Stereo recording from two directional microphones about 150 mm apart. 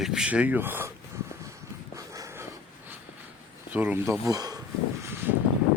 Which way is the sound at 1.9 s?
20° right (ahead or behind).